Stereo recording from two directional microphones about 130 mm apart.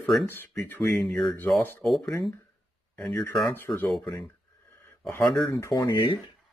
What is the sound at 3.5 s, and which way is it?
Speech, 20° left (ahead or behind).